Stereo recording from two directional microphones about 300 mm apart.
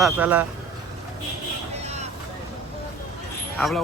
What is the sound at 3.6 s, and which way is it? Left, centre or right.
Speech, centre.